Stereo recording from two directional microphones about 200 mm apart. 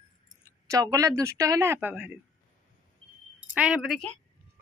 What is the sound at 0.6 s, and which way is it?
Speech, 15° right (ahead or behind).